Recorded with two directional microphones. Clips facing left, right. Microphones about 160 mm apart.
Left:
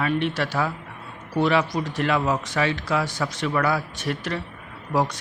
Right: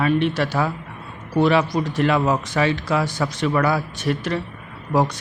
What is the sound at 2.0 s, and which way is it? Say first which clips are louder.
A man's voice: right 3 dB; 35° right (ahead or behind).